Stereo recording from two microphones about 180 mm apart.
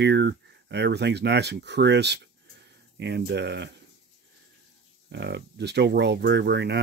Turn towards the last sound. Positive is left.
turn(degrees=-70)  # may be behind; listen again after turning